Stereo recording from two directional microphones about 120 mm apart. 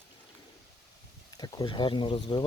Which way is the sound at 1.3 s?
40° left (ahead or behind).